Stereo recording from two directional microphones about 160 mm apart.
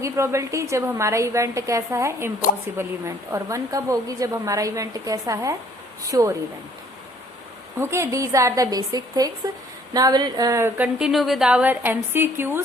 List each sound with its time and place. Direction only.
0.0 s a woman's voice: 20° right (ahead or behind)
7.8 s a woman's voice: 15° right (ahead or behind)